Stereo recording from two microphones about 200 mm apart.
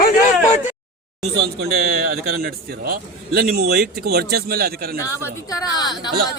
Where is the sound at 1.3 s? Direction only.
50° right (ahead or behind).